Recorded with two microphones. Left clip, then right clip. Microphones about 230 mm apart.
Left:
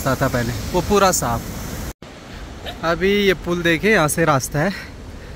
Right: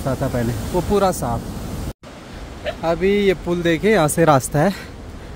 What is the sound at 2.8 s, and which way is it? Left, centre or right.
Speech, centre.